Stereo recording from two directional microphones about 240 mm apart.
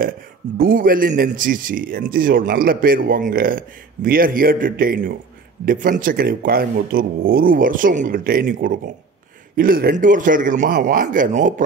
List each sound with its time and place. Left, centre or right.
0.6 s speech: right